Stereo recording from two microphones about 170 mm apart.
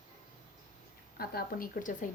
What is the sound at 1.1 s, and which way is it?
Speech, 60° left (ahead or behind).